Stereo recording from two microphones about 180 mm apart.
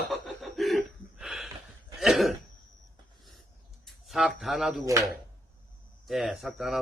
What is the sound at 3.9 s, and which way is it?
Speech, centre (ahead or behind).